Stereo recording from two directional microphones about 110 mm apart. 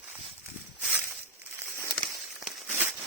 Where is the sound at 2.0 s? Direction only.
Centre (ahead or behind).